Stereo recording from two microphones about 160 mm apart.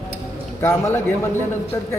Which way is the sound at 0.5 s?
15° left (ahead or behind).